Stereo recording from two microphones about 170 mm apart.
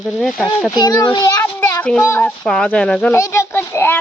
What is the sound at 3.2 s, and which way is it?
Speech, 15° left (ahead or behind).